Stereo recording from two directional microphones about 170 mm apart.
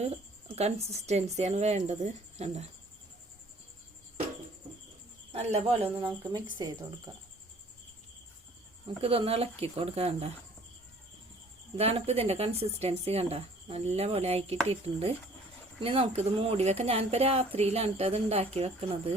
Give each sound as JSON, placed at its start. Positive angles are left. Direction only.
{"t": 0.5, "sound": "speech", "side_deg": -40}
{"t": 5.3, "sound": "speech", "side_deg": -40}
{"t": 9.0, "sound": "speech", "side_deg": -35}
{"t": 11.8, "sound": "speech", "side_deg": -35}